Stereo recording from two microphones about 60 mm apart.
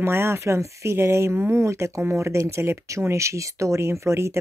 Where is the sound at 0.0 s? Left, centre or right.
Right.